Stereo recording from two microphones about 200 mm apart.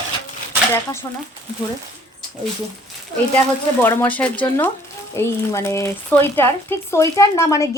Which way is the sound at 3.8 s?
10° left (ahead or behind).